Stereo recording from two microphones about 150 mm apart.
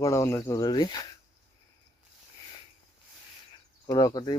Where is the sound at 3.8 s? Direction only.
25° left (ahead or behind).